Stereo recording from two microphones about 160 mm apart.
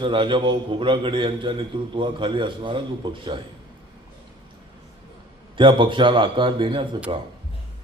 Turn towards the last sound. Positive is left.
turn(degrees=-35)  # may be behind; listen again after turning